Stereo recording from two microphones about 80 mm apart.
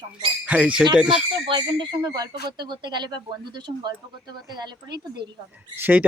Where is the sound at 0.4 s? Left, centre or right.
Centre.